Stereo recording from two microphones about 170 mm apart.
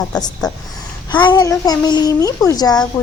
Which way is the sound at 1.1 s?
25° left (ahead or behind).